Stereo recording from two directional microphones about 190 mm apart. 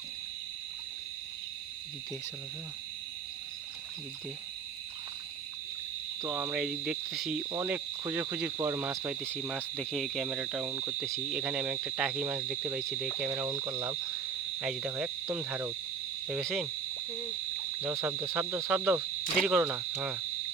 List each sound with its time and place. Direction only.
6.2 s speech: 10° right (ahead or behind)
7.5 s speech: 15° right (ahead or behind)
11.0 s speech: centre (ahead or behind)
16.2 s cricket: centre (ahead or behind)
17.7 s speech: 10° right (ahead or behind)